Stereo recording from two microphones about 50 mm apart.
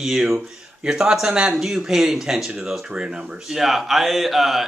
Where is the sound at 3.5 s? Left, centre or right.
Centre.